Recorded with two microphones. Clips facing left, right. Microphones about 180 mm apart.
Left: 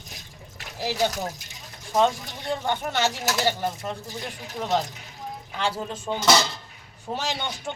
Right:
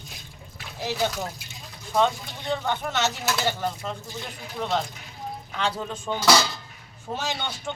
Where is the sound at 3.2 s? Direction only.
40° left (ahead or behind).